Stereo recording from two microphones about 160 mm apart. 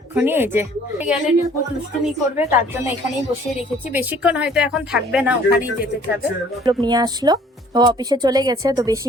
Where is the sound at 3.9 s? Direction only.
10° right (ahead or behind).